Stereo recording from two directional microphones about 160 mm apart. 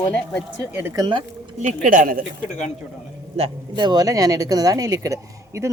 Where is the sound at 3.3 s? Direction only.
30° right (ahead or behind).